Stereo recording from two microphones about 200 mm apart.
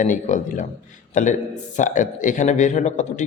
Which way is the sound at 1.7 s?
40° left (ahead or behind).